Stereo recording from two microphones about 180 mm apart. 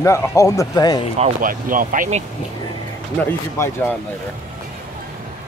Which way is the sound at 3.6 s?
15° left (ahead or behind).